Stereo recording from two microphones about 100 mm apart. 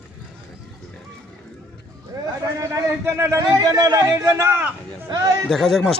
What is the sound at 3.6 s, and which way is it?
Speech, 40° right (ahead or behind).